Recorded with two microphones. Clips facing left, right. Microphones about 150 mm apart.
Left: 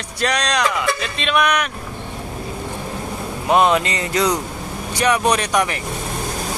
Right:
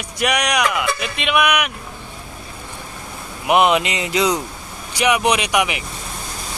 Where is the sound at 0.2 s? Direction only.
10° right (ahead or behind).